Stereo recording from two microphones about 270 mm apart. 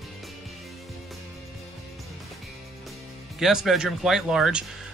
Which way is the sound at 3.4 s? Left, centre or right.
Centre.